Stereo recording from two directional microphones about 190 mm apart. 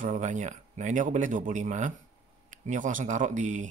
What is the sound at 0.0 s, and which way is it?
Speech, 40° right (ahead or behind).